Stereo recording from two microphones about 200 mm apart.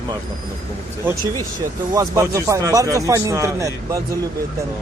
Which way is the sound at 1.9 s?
15° right (ahead or behind).